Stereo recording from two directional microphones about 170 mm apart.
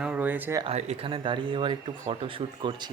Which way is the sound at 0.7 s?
40° right (ahead or behind).